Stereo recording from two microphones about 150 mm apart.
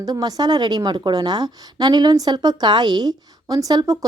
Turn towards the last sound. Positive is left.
turn(degrees=-25)  # may be behind; listen again after turning